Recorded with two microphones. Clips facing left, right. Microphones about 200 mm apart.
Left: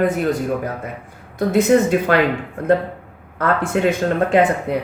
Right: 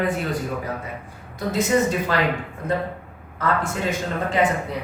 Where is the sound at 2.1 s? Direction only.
60° left (ahead or behind).